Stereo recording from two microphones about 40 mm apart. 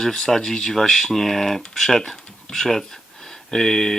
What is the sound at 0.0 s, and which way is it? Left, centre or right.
Speech, centre.